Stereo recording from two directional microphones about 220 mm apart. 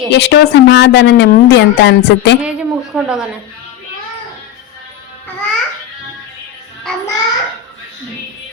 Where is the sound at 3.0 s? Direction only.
5° right (ahead or behind).